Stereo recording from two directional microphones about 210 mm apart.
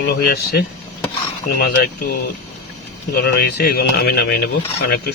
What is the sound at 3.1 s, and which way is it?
Speech, 50° left (ahead or behind).